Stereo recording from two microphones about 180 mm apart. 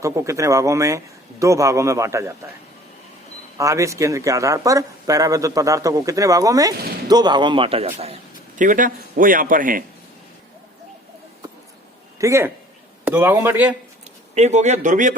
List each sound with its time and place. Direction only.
0.0 s a man's voice: 15° right (ahead or behind)
3.6 s a man's voice: 15° right (ahead or behind); by 9.8 s 50° right (ahead or behind)
12.2 s a man's voice: 15° right (ahead or behind)
14.3 s speech: 40° right (ahead or behind)